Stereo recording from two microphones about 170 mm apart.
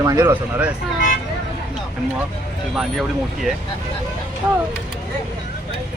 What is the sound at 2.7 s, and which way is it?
Speech, centre (ahead or behind).